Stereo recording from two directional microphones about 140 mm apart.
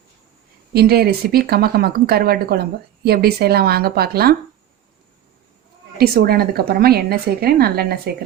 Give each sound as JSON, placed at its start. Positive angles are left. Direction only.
{"t": 0.7, "sound": "speech", "side_deg": -90}
{"t": 6.0, "sound": "speech", "side_deg": -90}